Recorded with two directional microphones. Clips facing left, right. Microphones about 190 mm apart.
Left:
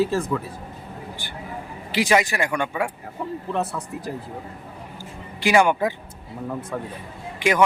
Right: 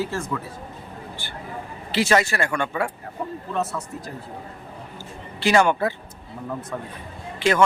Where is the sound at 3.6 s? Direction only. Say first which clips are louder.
Even; 35° left (ahead or behind).